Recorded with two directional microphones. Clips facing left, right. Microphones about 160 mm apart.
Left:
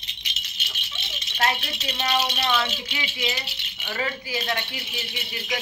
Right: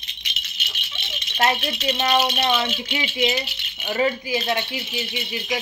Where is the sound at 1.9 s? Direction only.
30° right (ahead or behind).